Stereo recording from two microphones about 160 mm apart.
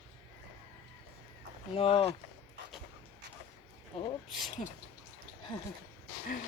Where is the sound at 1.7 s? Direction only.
35° left (ahead or behind).